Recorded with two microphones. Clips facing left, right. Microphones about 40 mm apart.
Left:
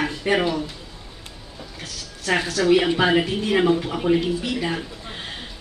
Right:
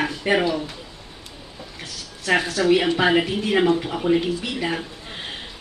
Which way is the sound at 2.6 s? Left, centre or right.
Centre.